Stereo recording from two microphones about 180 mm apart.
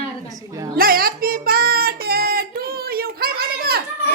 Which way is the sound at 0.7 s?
55° right (ahead or behind).